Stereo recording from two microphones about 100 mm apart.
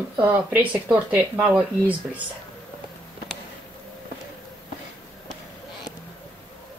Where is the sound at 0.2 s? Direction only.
15° right (ahead or behind).